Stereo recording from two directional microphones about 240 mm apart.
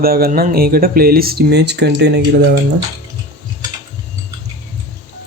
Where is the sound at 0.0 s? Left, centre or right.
Right.